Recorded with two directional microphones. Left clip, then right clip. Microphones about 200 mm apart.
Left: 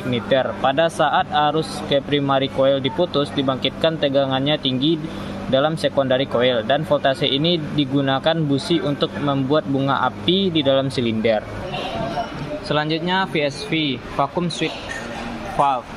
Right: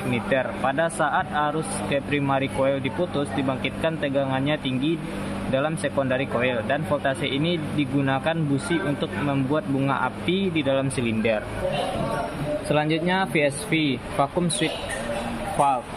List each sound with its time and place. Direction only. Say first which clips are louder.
0.1 s speech: left 6 dB; 15° left (ahead or behind)
12.6 s speech: left 3 dB; centre (ahead or behind)